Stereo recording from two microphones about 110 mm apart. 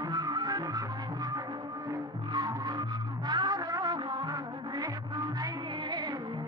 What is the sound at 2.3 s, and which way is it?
Music, 40° right (ahead or behind).